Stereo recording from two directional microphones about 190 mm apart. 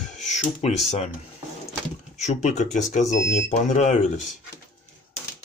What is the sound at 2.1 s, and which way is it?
Speech, 40° left (ahead or behind).